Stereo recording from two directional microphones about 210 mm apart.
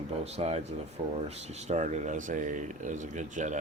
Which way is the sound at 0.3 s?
30° right (ahead or behind).